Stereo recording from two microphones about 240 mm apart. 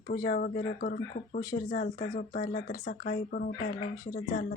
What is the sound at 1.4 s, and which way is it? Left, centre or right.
Speech, centre.